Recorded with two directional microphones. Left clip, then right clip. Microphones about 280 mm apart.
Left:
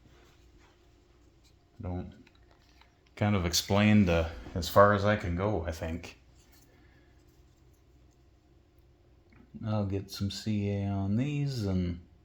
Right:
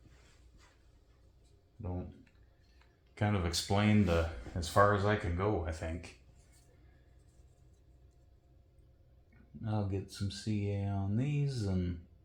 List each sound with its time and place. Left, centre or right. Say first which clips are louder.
2.7 s speech: left 5 dB; left
9.6 s speech: left 4 dB; left